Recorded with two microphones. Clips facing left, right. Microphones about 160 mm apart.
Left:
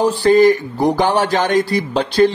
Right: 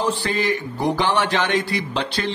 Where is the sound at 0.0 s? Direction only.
40° left (ahead or behind).